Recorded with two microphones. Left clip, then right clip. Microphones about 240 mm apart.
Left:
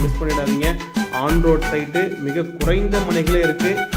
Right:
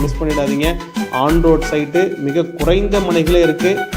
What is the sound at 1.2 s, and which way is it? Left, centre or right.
A man's voice, centre.